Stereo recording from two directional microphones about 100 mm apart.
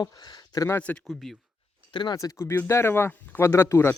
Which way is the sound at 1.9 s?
50° left (ahead or behind).